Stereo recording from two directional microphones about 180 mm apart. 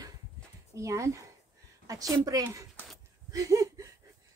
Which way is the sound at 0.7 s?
15° right (ahead or behind).